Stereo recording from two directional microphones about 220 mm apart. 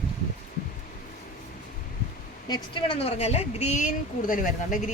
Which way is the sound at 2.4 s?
20° left (ahead or behind).